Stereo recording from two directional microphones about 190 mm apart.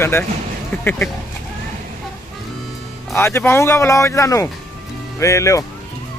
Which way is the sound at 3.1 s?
10° left (ahead or behind).